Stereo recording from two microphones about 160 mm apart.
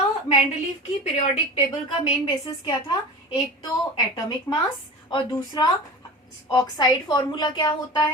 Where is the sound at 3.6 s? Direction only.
25° left (ahead or behind).